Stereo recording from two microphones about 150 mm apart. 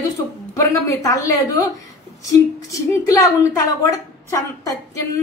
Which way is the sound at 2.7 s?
20° left (ahead or behind).